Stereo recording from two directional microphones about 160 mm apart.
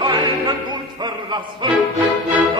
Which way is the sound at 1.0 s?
30° right (ahead or behind).